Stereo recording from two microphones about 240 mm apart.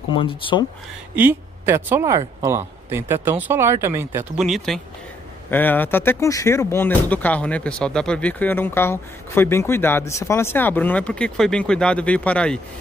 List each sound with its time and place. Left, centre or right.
0.1 s speech: left
1.1 s speech: centre